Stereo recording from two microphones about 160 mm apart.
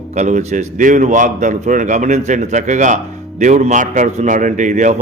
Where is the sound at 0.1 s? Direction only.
50° right (ahead or behind).